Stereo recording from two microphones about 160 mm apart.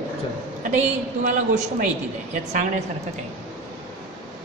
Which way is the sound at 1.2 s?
55° right (ahead or behind).